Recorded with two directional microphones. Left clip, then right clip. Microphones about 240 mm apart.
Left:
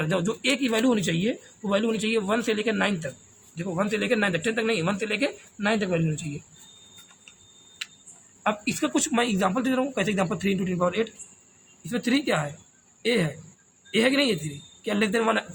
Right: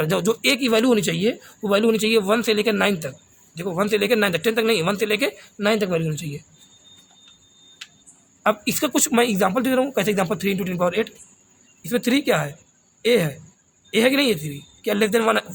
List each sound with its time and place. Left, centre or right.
0.0 s speech: right
8.4 s speech: right